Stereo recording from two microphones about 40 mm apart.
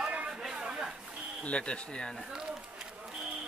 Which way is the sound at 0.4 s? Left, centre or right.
Centre.